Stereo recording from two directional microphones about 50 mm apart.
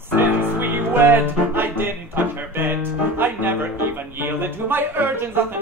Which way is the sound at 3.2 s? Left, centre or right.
Right.